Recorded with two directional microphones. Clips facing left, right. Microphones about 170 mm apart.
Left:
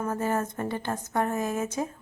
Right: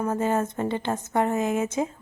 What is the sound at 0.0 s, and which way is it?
A woman's voice, 20° right (ahead or behind).